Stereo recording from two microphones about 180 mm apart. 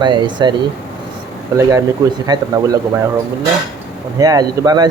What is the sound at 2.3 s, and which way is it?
Speech, 20° right (ahead or behind).